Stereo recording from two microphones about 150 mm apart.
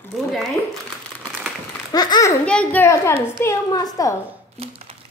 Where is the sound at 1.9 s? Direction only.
25° left (ahead or behind).